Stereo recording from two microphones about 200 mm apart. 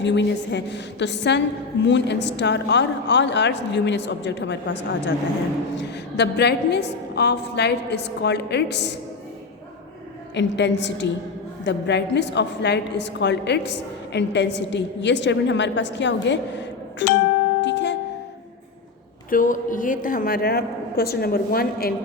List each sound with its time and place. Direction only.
0.0 s a woman's voice: 60° left (ahead or behind)
10.3 s a woman's voice: 60° left (ahead or behind)
17.6 s music: 65° left (ahead or behind)
19.3 s a woman's voice: 40° left (ahead or behind)